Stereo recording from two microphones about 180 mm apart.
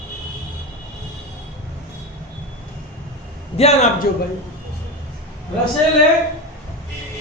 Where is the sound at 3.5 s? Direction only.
35° left (ahead or behind).